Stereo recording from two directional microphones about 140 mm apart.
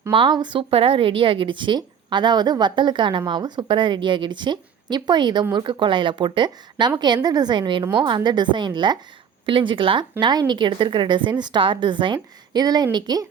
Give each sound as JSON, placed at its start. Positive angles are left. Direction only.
{"t": 0.1, "sound": "a woman's voice", "side_deg": -35}